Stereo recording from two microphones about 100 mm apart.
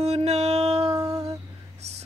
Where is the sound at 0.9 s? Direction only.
40° right (ahead or behind).